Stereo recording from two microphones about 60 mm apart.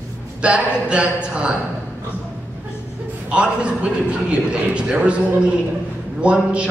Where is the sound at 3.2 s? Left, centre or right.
Centre.